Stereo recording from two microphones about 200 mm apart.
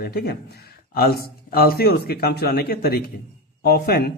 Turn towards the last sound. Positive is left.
turn(degrees=50)  # may be behind; listen again after turning